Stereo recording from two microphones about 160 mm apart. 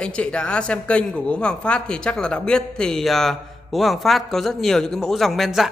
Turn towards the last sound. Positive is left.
turn(degrees=0)  # may be behind; listen again after turning